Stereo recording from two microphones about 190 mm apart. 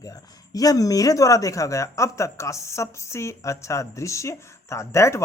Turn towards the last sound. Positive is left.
turn(degrees=15)  # may be behind; listen again after turning